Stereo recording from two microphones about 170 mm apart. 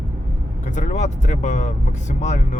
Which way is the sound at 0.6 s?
45° left (ahead or behind).